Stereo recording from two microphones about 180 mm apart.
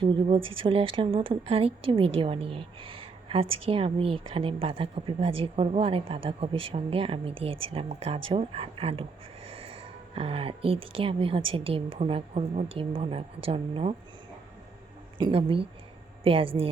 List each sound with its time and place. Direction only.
0.0 s a woman's voice: 30° right (ahead or behind)
15.2 s a woman's voice: 30° right (ahead or behind)